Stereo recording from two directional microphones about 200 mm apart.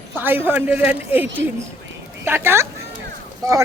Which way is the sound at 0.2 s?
10° right (ahead or behind).